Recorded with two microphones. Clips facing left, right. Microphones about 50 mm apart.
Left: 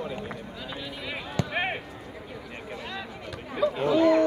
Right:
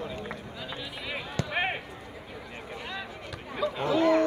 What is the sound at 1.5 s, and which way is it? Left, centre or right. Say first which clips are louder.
Basketball bounce: right 1 dB; centre.